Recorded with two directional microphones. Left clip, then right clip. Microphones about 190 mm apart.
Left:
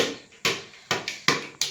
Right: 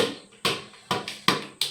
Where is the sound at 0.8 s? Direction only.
45° right (ahead or behind).